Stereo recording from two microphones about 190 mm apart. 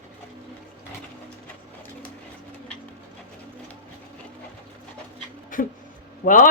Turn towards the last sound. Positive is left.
turn(degrees=45)  # may be behind; listen again after turning